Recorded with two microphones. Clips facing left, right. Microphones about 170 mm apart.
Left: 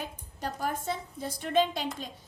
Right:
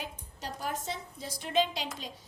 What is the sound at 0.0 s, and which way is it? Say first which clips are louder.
A woman's voice: left 4 dB; 50° left (ahead or behind).